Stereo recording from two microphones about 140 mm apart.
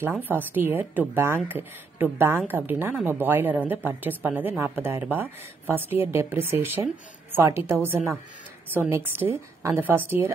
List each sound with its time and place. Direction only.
0.2 s a woman's voice: 15° right (ahead or behind)